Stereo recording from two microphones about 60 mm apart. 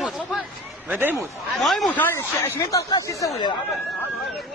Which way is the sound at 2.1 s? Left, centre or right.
Left.